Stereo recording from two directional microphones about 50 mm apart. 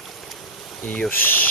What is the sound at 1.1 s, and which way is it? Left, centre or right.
Speech, left.